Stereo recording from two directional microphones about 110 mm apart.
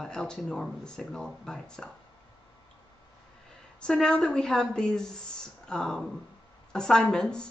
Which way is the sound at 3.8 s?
10° left (ahead or behind).